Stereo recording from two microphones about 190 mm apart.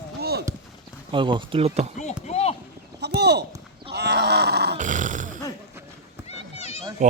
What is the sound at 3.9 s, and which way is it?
Grunt, 60° right (ahead or behind).